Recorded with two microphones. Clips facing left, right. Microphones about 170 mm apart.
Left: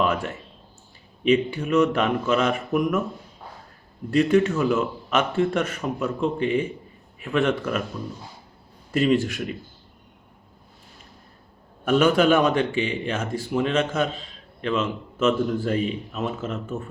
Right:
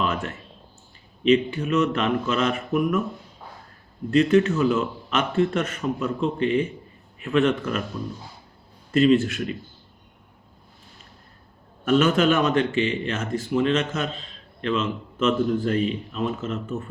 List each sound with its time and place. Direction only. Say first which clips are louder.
1.3 s a man's voice: even; 10° left (ahead or behind)
4.1 s a man's voice: right 1 dB; 10° left (ahead or behind)
8.9 s a man's voice: right 3 dB; 10° left (ahead or behind)
11.9 s a man's voice: left 1 dB; 10° left (ahead or behind)